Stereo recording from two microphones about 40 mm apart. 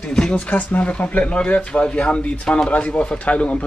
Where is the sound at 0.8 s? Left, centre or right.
Left.